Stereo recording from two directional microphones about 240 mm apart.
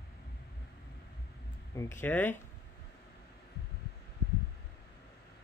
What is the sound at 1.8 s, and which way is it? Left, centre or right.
Speech, centre.